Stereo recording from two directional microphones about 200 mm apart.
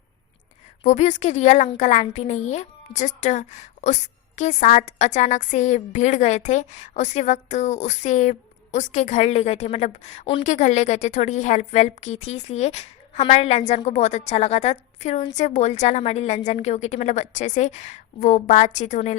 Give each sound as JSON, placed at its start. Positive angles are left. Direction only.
{"t": 0.9, "sound": "a woman's voice", "side_deg": 35}